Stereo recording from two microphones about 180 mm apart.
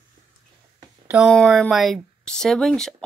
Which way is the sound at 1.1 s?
5° right (ahead or behind).